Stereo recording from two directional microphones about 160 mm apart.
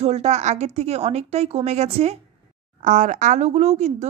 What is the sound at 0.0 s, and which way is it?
A woman's voice, 45° right (ahead or behind).